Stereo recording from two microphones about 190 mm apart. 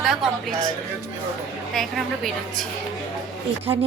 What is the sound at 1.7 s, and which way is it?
Speech, centre (ahead or behind).